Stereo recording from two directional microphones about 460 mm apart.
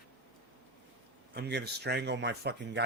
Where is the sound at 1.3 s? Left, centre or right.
Right.